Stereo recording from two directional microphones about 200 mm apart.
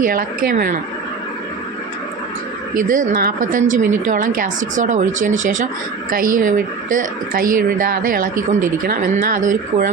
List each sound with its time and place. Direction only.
0.0 s speech: 45° right (ahead or behind)
2.7 s a woman's voice: 40° right (ahead or behind)